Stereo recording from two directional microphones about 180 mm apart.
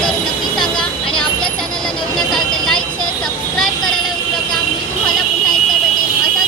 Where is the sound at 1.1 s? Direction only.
5° left (ahead or behind).